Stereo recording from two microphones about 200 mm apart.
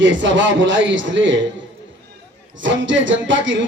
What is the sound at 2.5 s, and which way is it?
Speech, 65° right (ahead or behind).